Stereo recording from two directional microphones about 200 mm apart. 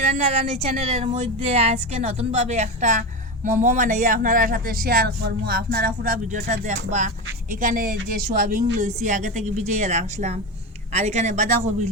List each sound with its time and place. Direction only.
0.0 s speech: 30° right (ahead or behind)
7.5 s speech: 40° right (ahead or behind)